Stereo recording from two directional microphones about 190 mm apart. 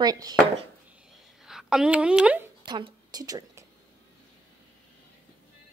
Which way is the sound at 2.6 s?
25° right (ahead or behind).